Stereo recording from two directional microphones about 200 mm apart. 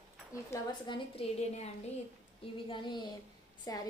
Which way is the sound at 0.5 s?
25° left (ahead or behind).